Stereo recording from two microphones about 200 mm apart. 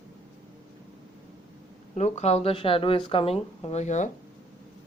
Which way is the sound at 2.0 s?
35° left (ahead or behind).